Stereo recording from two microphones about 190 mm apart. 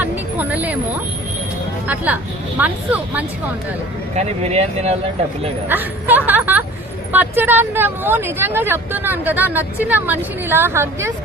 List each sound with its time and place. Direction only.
0.0 s a sound: 10° right (ahead or behind)
2.6 s speech: 10° right (ahead or behind)
4.1 s speech: 35° right (ahead or behind)
5.6 s speech: 10° right (ahead or behind)